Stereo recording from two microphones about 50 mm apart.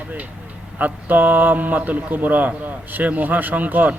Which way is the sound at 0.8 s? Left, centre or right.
Right.